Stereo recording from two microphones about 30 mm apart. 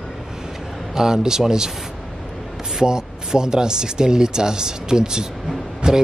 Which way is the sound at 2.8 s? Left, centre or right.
Right.